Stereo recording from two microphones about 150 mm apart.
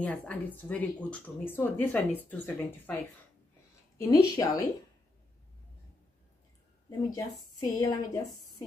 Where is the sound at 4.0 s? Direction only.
25° left (ahead or behind).